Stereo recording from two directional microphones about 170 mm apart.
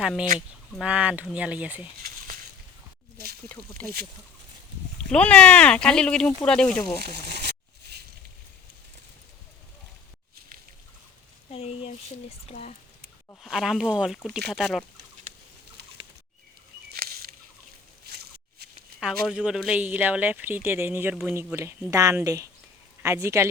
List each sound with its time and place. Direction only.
0.0 s speech: 5° right (ahead or behind)
2.0 s a sound: 55° right (ahead or behind)
3.8 s speech: 10° left (ahead or behind)
5.1 s speech: 10° left (ahead or behind)
7.0 s a sound: 70° right (ahead or behind)
11.5 s speech: 35° left (ahead or behind)
13.4 s speech: centre (ahead or behind)
16.9 s a sound: 65° right (ahead or behind)
18.9 s speech: centre (ahead or behind)